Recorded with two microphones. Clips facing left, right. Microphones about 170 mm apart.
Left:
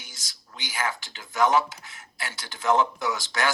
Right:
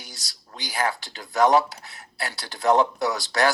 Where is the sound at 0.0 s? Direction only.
35° right (ahead or behind).